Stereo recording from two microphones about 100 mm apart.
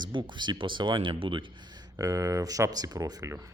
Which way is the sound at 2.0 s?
35° right (ahead or behind).